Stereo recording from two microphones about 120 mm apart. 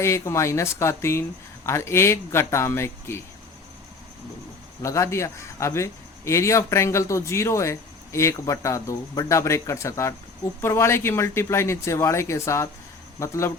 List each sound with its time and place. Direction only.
0.0 s speech: 20° left (ahead or behind)
4.8 s speech: 25° left (ahead or behind)